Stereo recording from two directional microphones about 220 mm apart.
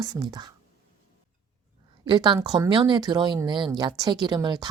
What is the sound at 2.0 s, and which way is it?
Speech, 20° right (ahead or behind).